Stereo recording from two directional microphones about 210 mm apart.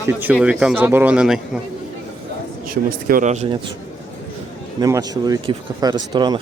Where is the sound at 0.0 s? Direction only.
10° right (ahead or behind).